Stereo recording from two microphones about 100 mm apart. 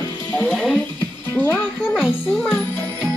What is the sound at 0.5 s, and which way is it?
Speech, 5° left (ahead or behind).